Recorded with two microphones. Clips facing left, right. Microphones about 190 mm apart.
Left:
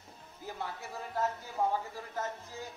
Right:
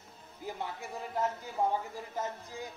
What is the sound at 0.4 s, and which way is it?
Music, 15° right (ahead or behind).